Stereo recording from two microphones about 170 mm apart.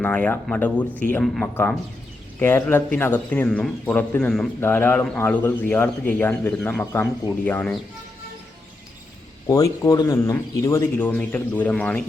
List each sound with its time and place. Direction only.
0.0 s speech: 10° left (ahead or behind)
9.5 s speech: 20° left (ahead or behind)